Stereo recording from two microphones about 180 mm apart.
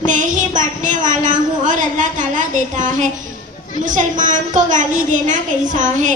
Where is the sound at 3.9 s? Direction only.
45° right (ahead or behind).